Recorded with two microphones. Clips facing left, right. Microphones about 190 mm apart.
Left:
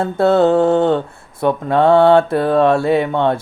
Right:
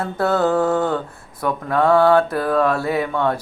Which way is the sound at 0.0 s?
25° left (ahead or behind).